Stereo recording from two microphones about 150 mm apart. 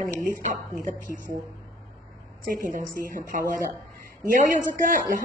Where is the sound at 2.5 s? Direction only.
65° right (ahead or behind).